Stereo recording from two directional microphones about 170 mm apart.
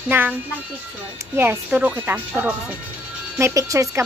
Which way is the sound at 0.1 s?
10° right (ahead or behind).